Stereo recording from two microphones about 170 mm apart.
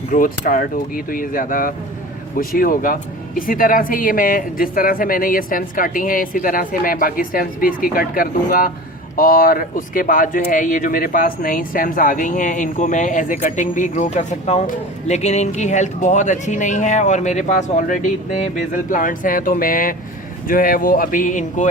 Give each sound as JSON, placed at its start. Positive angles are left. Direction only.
{"t": 0.1, "sound": "speech", "side_deg": 55}